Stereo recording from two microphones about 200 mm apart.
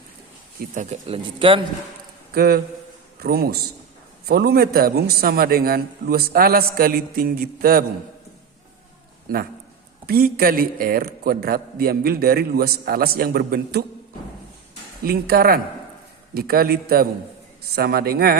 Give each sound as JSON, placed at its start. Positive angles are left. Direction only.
{"t": 0.6, "sound": "speech", "side_deg": -40}
{"t": 2.3, "sound": "a man's voice", "side_deg": -50}
{"t": 10.1, "sound": "a man's voice", "side_deg": -50}
{"t": 15.0, "sound": "a man's voice", "side_deg": -50}